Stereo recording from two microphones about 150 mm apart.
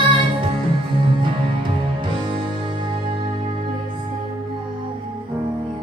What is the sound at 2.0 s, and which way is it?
Music, 30° right (ahead or behind).